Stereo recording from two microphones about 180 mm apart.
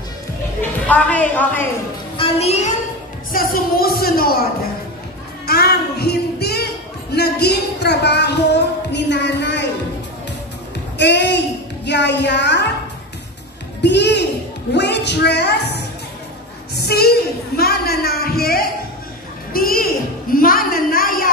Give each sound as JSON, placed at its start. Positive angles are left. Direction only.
{"t": 0.6, "sound": "a woman's voice", "side_deg": 10}
{"t": 2.1, "sound": "music", "side_deg": 30}
{"t": 3.3, "sound": "speech", "side_deg": 50}
{"t": 5.5, "sound": "child singing", "side_deg": 60}
{"t": 7.2, "sound": "speech", "side_deg": 65}
{"t": 11.0, "sound": "a woman's voice", "side_deg": 70}
{"t": 13.8, "sound": "a woman's voice", "side_deg": 70}